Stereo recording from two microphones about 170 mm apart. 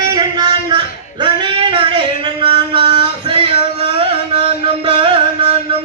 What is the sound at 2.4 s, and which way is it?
Music, 30° right (ahead or behind).